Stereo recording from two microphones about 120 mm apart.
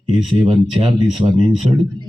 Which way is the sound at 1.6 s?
45° right (ahead or behind).